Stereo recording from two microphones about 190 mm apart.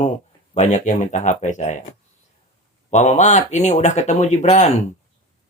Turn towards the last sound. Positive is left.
turn(degrees=35)  # may be behind; listen again after turning